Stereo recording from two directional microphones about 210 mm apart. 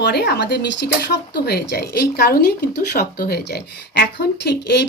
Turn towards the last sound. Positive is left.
turn(degrees=55)  # may be behind; listen again after turning